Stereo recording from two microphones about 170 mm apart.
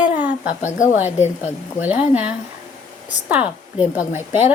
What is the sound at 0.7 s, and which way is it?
Speech, 45° left (ahead or behind).